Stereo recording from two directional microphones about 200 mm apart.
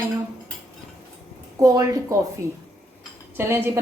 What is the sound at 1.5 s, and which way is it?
Speech, 15° right (ahead or behind).